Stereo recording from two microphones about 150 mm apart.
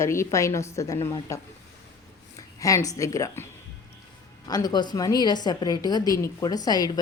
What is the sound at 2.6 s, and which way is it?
Speech, 20° left (ahead or behind).